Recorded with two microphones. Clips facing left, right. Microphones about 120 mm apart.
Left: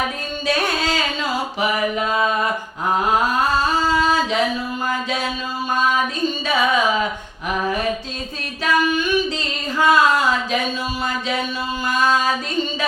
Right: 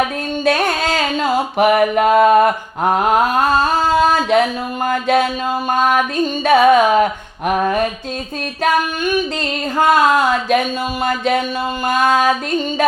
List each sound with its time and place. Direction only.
0.4 s mantra: 55° right (ahead or behind)
8.6 s music: 50° right (ahead or behind)
9.7 s speech: 50° right (ahead or behind)
11.0 s music: 55° right (ahead or behind)
11.9 s a sound: 55° right (ahead or behind)